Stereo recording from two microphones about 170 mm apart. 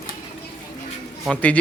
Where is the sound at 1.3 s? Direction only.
10° left (ahead or behind).